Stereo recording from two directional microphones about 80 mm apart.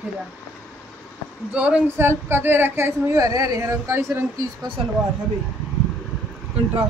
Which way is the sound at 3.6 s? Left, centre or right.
Right.